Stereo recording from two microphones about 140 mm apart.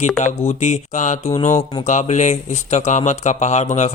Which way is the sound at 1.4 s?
45° left (ahead or behind).